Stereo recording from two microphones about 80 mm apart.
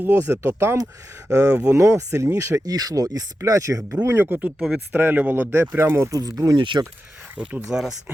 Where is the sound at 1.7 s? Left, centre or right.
Right.